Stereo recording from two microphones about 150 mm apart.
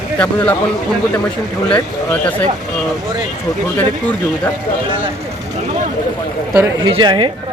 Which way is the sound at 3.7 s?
10° left (ahead or behind).